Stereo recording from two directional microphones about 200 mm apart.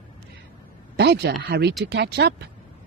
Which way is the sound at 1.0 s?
55° right (ahead or behind).